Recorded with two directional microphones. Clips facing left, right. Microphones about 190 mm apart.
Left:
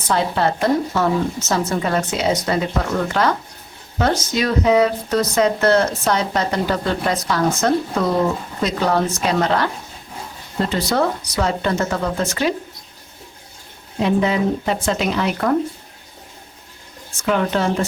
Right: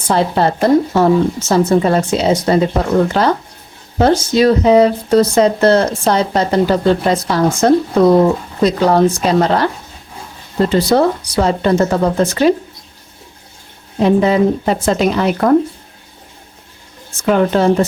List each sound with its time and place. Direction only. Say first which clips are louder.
0.1 s speech: right 5 dB; 35° right (ahead or behind)
10.8 s speech: right 7 dB; 35° right (ahead or behind)
14.0 s speech: right 6 dB; 40° right (ahead or behind)
17.2 s speech: right 6 dB; 40° right (ahead or behind)